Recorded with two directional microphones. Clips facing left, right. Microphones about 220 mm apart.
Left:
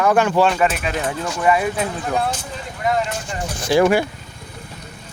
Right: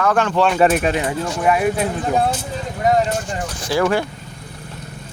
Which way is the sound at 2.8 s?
40° right (ahead or behind).